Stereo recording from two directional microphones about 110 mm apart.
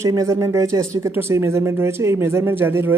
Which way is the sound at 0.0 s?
30° right (ahead or behind).